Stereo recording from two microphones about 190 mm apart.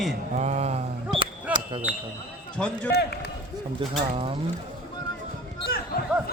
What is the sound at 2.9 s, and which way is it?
Speech, 60° left (ahead or behind).